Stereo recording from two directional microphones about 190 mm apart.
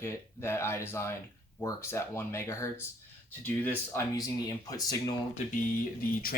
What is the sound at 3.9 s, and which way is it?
Speech, 20° left (ahead or behind).